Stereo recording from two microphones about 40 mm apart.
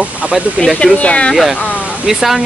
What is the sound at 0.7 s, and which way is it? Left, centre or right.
Speech, left.